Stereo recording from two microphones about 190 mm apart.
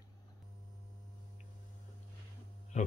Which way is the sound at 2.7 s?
40° left (ahead or behind).